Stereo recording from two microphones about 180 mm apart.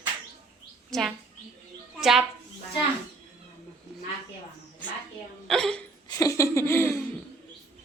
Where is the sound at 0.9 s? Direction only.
Centre (ahead or behind).